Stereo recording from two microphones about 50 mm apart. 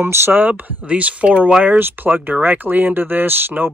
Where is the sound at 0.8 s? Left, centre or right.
Right.